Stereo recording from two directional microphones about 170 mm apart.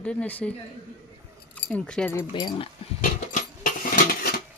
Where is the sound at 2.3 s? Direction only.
25° left (ahead or behind).